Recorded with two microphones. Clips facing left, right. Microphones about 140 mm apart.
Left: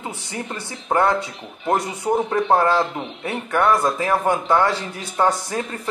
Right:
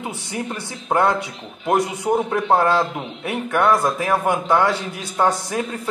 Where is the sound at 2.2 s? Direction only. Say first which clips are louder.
Left 1 dB; 5° right (ahead or behind).